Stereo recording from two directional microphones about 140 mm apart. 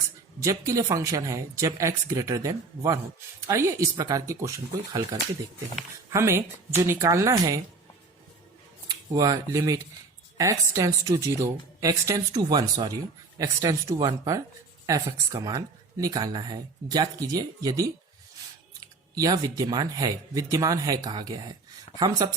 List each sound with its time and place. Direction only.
0.6 s speech: 25° right (ahead or behind)
6.1 s speech: 20° right (ahead or behind)
9.0 s speech: 25° right (ahead or behind)
19.1 s speech: 25° right (ahead or behind)